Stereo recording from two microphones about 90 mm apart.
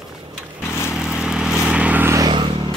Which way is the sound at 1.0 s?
5° right (ahead or behind).